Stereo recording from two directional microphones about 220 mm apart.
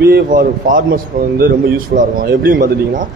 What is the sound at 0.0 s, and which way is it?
Speech, 45° right (ahead or behind).